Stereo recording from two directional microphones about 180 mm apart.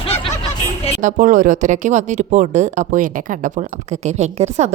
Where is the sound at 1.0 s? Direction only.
45° right (ahead or behind).